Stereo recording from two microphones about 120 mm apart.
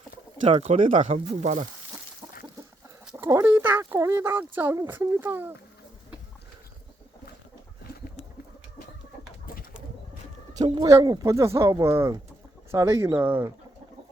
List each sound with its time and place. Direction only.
0.4 s speech: 70° right (ahead or behind)
3.2 s speech: 25° right (ahead or behind)
10.6 s speech: 30° right (ahead or behind)